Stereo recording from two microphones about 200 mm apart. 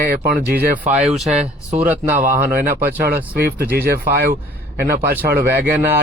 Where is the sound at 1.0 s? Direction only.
Centre (ahead or behind).